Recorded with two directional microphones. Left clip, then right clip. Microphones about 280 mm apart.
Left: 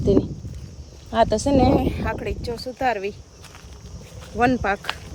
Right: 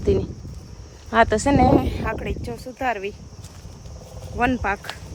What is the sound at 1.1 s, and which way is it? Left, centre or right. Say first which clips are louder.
Speech: right 2 dB; right.